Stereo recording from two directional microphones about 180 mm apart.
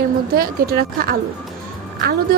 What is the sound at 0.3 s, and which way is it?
A woman's voice, 55° right (ahead or behind).